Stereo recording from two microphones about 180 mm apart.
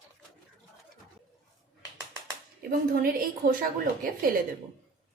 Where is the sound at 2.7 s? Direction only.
55° right (ahead or behind).